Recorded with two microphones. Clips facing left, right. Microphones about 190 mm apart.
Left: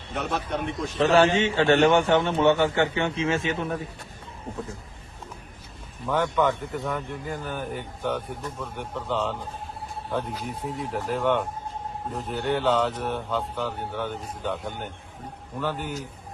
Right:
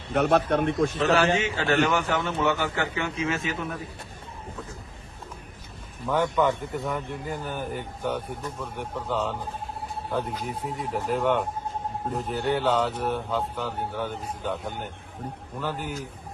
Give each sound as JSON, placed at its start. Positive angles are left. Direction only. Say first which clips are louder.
{"t": 0.1, "sound": "a man's voice", "louder": "right 7 dB", "side_deg": -55}
{"t": 1.0, "sound": "a man's voice", "louder": "left 5 dB", "side_deg": 30}
{"t": 6.1, "sound": "speech", "louder": "even", "side_deg": -5}